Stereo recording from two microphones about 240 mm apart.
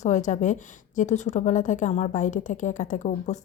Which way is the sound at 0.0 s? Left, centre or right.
Left.